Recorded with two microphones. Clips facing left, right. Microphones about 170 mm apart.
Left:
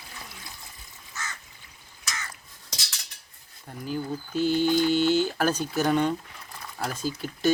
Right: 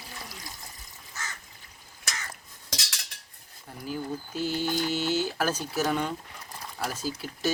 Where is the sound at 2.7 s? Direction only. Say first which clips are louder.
Right 4 dB; 90° right.